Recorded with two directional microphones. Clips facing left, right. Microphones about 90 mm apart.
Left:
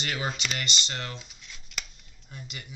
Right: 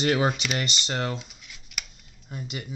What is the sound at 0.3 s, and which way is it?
Speech, 10° right (ahead or behind).